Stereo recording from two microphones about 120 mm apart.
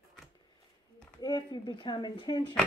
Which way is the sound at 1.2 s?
35° left (ahead or behind).